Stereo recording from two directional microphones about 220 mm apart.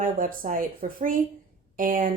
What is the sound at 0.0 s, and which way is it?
Speech, 40° right (ahead or behind).